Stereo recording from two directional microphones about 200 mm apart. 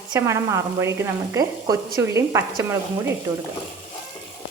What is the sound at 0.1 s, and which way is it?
Speech, 15° right (ahead or behind).